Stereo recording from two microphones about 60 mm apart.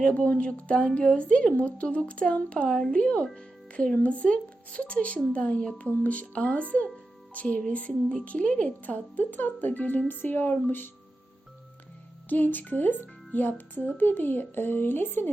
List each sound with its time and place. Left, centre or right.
0.0 s a woman's voice: left
12.3 s speech: left